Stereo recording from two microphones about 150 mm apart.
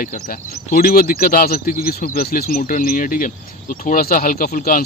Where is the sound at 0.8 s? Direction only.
80° left.